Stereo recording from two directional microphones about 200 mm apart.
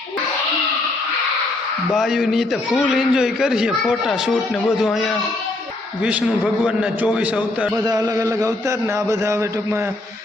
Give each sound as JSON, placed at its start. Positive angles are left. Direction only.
{"t": 1.9, "sound": "a man's voice", "side_deg": 0}
{"t": 7.9, "sound": "a man's voice", "side_deg": -20}